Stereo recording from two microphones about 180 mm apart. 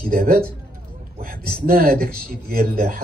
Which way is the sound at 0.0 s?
50° right (ahead or behind).